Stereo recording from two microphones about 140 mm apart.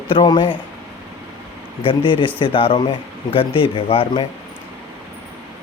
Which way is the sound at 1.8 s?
35° left (ahead or behind).